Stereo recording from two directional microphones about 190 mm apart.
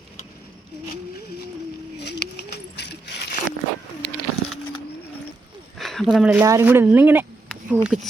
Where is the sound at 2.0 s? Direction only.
60° left (ahead or behind).